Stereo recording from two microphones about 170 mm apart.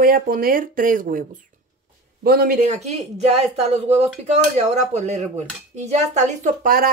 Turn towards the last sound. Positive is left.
turn(degrees=-55)  # may be behind; listen again after turning